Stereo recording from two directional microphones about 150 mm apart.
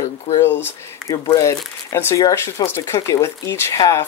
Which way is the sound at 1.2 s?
20° left (ahead or behind).